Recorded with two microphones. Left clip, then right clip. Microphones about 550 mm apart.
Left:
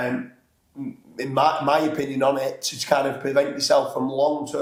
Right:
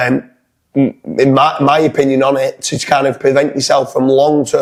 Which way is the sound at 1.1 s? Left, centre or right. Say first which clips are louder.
Right 9 dB; right.